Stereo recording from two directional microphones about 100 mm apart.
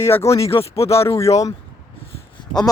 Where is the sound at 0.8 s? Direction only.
30° left (ahead or behind).